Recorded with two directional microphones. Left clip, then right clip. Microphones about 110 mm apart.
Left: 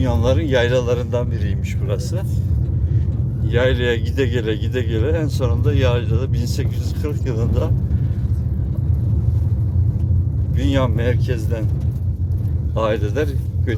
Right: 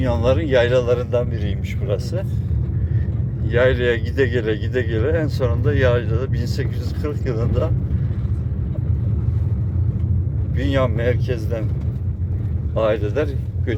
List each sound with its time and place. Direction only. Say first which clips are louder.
0.0 s speech: right 1 dB; 20° left (ahead or behind)
3.4 s speech: right 2 dB; 20° left (ahead or behind)
10.6 s speech: right 1 dB; 25° left (ahead or behind)
12.7 s speech: right 1 dB; 30° left (ahead or behind)